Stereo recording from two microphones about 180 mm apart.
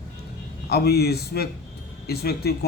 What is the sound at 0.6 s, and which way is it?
Speech, 60° left (ahead or behind).